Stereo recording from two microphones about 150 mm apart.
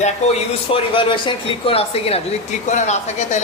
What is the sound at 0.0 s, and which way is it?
A man's voice, 40° left (ahead or behind).